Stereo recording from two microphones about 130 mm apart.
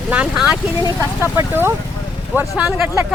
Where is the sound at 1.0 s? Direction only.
20° right (ahead or behind).